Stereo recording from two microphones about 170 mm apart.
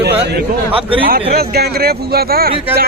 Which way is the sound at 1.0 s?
65° right (ahead or behind).